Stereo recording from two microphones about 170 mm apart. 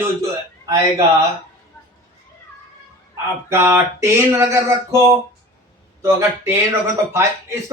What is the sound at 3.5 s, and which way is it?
A man's voice, 15° right (ahead or behind).